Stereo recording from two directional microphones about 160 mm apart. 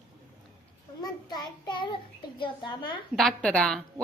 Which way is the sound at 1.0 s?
25° left (ahead or behind).